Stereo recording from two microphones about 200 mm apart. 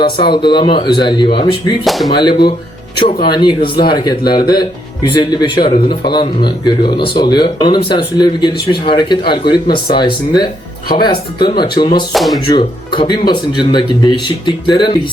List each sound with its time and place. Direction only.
0.0 s speech: 25° left (ahead or behind)
1.8 s speech: centre (ahead or behind)
2.0 s speech: 25° left (ahead or behind)
12.1 s speech: centre (ahead or behind)
12.5 s speech: 25° left (ahead or behind)